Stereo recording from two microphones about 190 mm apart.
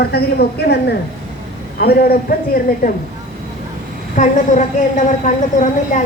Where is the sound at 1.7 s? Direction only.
55° left (ahead or behind).